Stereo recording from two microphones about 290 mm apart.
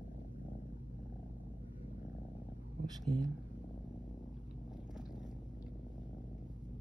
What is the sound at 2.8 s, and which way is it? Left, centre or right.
Speech, centre.